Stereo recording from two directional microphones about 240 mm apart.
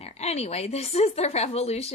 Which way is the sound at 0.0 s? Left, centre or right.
Left.